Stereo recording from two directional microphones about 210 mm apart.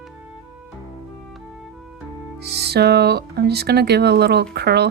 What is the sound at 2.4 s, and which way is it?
A woman's voice, 50° right (ahead or behind).